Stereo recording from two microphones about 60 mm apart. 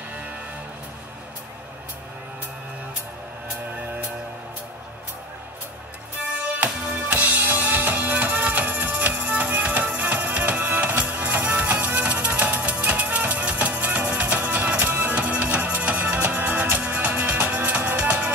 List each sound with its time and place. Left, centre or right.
6.6 s music: right